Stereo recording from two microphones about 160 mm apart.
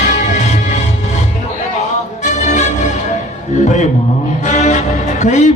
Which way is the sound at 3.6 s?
45° left (ahead or behind).